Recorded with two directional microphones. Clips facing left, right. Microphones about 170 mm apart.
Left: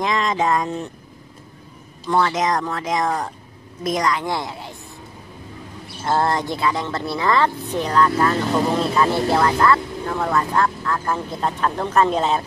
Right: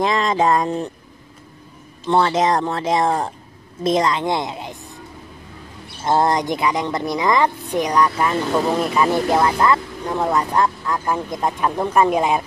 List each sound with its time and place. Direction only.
0.0 s speech: 35° right (ahead or behind)
2.0 s speech: 30° right (ahead or behind)
6.0 s speech: 15° right (ahead or behind)